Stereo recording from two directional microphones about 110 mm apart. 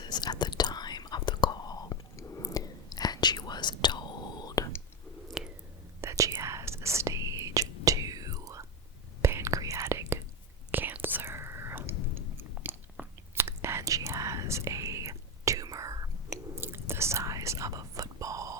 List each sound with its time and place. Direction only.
0.0 s whispering: 40° left (ahead or behind)
5.4 s chewing: 5° right (ahead or behind)
6.0 s whispering: 30° right (ahead or behind)